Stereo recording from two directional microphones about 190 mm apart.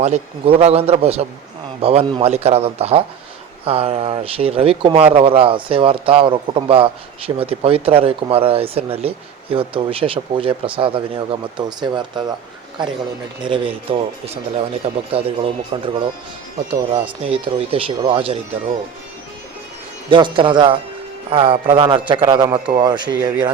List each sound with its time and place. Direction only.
0.0 s speech: 35° right (ahead or behind)
20.1 s speech: 25° right (ahead or behind)